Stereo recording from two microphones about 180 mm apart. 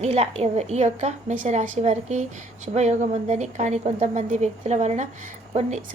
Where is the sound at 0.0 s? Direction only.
35° right (ahead or behind).